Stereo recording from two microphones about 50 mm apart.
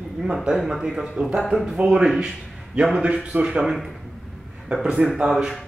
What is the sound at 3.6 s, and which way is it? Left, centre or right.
Speech, centre.